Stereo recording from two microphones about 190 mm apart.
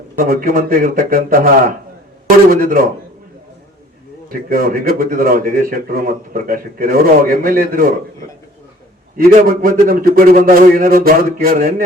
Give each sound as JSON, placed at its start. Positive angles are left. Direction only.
{"t": 0.2, "sound": "a man's voice", "side_deg": -50}
{"t": 2.5, "sound": "a man's voice", "side_deg": -50}
{"t": 4.4, "sound": "a man's voice", "side_deg": -50}
{"t": 9.1, "sound": "a man's voice", "side_deg": -50}